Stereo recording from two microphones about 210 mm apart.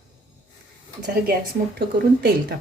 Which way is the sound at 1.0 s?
45° right (ahead or behind).